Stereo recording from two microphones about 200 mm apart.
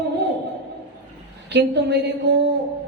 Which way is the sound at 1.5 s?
60° right (ahead or behind).